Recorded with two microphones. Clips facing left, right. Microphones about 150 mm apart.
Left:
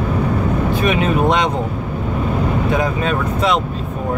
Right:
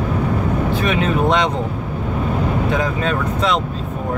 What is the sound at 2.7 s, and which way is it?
Speech, 10° left (ahead or behind).